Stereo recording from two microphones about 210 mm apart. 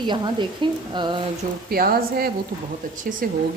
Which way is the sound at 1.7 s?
45° right (ahead or behind).